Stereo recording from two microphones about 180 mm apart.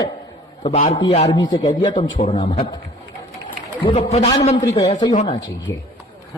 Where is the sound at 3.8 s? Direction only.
30° left (ahead or behind).